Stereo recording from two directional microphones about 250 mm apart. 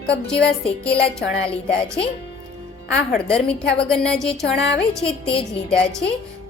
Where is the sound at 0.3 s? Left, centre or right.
Centre.